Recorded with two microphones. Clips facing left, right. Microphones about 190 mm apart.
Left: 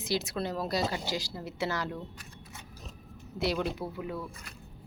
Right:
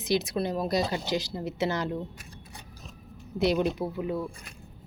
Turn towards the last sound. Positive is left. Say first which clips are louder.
# right 6 dB
turn(degrees=-25)  # may be behind; listen again after turning